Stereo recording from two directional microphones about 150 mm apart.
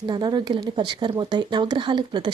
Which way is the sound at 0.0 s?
30° right (ahead or behind).